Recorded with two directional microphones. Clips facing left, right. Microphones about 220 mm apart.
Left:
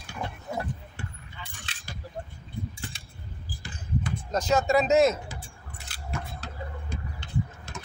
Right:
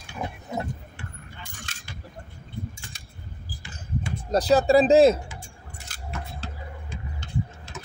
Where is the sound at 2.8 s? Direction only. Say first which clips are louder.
Left 6 dB; 45° right (ahead or behind).